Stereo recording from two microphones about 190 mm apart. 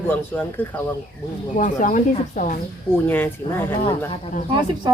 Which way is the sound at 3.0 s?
10° left (ahead or behind).